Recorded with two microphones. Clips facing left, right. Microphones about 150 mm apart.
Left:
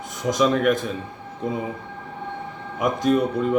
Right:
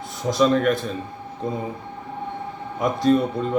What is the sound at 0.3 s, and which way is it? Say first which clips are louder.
Speech: right 1 dB; 15° left (ahead or behind).